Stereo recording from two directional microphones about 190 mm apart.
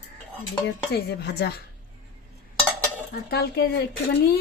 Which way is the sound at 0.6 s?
60° left (ahead or behind).